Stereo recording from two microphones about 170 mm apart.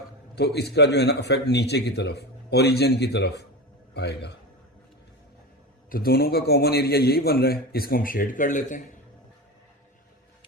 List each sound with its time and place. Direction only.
0.3 s a man's voice: 75° left (ahead or behind)
3.9 s a man's voice: 85° left
5.9 s a man's voice: 65° left (ahead or behind)